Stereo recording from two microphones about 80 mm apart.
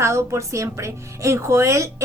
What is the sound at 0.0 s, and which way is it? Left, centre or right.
A woman's voice, right.